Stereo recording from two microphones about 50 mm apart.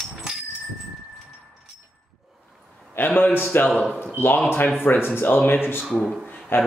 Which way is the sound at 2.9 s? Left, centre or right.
Left.